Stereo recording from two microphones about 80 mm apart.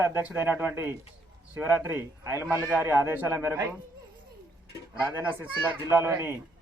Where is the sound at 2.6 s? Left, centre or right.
Centre.